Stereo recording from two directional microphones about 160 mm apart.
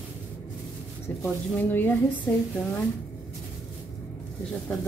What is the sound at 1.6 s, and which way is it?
Speech, 10° left (ahead or behind).